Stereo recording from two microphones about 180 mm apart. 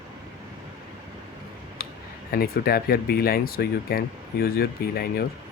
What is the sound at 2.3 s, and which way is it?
Speech, 60° left (ahead or behind).